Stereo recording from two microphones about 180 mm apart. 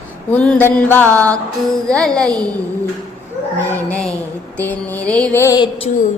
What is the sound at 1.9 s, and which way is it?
Speech, 5° left (ahead or behind).